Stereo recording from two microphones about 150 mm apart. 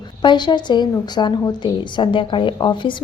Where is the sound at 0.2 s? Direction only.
30° left (ahead or behind).